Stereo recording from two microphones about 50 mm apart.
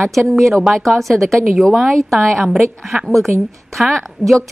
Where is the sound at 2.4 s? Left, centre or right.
Centre.